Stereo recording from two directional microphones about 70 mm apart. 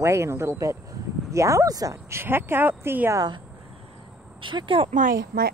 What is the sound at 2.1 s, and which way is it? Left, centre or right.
A woman's voice, right.